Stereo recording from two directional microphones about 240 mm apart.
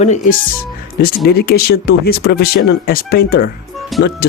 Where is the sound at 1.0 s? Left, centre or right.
Left.